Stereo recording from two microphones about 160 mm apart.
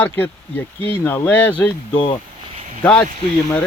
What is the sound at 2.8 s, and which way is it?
Speech, 10° left (ahead or behind).